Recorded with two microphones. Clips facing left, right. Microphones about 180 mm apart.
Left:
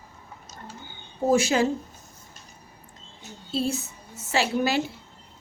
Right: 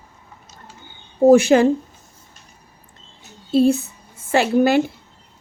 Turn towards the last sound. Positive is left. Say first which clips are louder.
# right 8 dB
turn(degrees=-55)  # may be behind; listen again after turning